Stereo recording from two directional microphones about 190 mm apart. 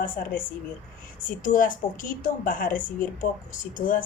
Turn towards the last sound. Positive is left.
turn(degrees=45)  # may be behind; listen again after turning